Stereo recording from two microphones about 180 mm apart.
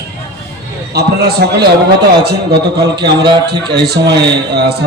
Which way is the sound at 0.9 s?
65° right (ahead or behind).